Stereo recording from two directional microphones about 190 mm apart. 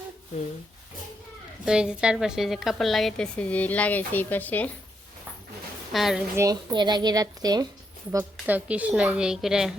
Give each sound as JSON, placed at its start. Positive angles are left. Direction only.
{"t": 1.6, "sound": "a woman's voice", "side_deg": -5}
{"t": 5.9, "sound": "a woman's voice", "side_deg": 0}
{"t": 6.3, "sound": "speech", "side_deg": -15}
{"t": 8.1, "sound": "a woman's voice", "side_deg": -10}